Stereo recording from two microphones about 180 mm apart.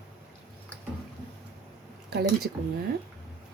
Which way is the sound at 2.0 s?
65° right (ahead or behind).